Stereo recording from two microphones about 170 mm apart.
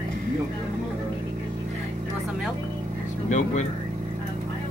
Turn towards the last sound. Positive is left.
turn(degrees=45)  # may be behind; listen again after turning